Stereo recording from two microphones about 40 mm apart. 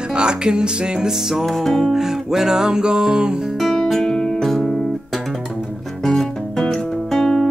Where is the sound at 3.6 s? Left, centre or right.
Centre.